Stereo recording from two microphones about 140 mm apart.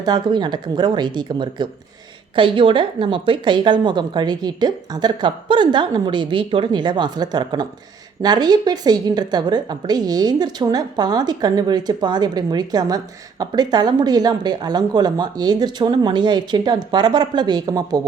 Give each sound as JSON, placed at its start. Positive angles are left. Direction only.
{"t": 0.0, "sound": "a woman's voice", "side_deg": -30}